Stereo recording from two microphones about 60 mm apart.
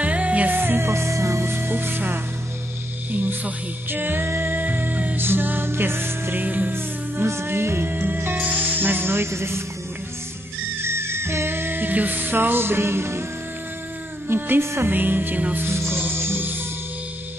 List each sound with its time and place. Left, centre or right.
0.0 s music: right
0.5 s music: right
0.8 s music: right
6.4 s music: right
7.2 s music: right
10.8 s music: right
14.2 s music: right
14.9 s music: right